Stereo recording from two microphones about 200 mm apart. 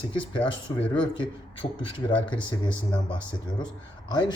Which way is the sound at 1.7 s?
25° left (ahead or behind).